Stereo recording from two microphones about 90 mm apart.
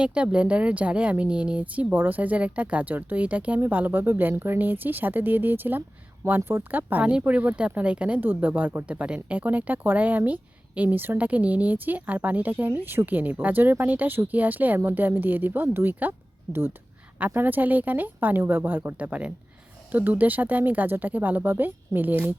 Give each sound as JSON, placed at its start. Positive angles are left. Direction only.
{"t": 0.0, "sound": "speech", "side_deg": -10}